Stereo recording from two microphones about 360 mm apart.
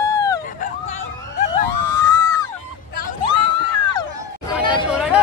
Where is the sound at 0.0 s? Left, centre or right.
Right.